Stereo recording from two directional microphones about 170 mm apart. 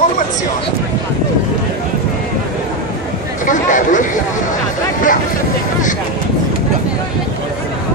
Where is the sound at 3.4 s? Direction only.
50° left (ahead or behind).